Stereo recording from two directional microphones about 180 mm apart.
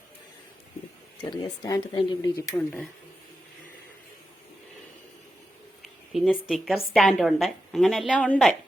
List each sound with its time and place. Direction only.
1.2 s speech: 20° left (ahead or behind)
2.3 s speech: 10° left (ahead or behind)
6.1 s a woman's voice: 5° left (ahead or behind)